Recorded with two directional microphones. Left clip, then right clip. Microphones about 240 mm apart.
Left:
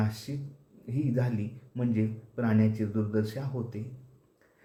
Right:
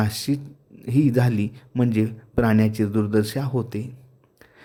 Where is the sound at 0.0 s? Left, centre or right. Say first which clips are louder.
Right 11 dB; right.